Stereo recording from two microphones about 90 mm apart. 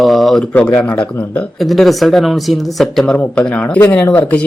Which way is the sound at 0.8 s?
15° left (ahead or behind).